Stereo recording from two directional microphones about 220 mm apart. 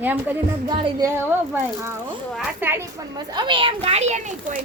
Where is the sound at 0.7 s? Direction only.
20° right (ahead or behind).